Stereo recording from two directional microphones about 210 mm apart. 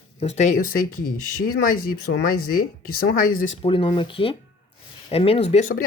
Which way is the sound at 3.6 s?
25° left (ahead or behind).